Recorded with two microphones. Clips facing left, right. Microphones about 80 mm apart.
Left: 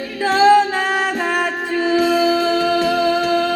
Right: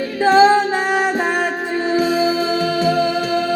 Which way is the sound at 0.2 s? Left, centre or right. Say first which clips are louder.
Even; right.